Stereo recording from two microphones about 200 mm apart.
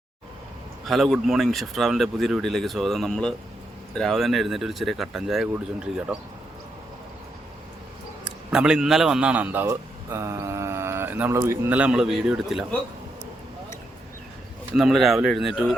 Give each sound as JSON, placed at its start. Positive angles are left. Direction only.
{"t": 0.9, "sound": "speech", "side_deg": 0}
{"t": 8.4, "sound": "a man's voice", "side_deg": -5}
{"t": 14.8, "sound": "speech", "side_deg": 0}